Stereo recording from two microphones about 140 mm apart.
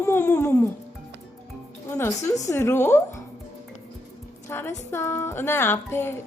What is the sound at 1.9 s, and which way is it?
A woman's voice, 20° left (ahead or behind).